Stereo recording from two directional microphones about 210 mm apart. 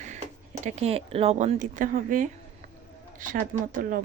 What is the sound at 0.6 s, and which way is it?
Speech, 30° right (ahead or behind).